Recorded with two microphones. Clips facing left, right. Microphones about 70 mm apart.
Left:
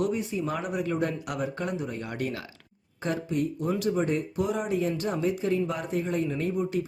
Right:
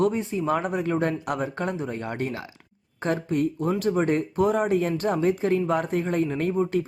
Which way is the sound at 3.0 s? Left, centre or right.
Right.